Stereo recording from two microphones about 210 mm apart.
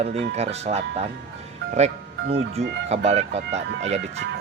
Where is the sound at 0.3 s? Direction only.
30° right (ahead or behind).